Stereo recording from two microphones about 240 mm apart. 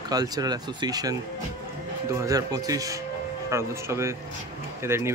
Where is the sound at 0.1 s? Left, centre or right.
Centre.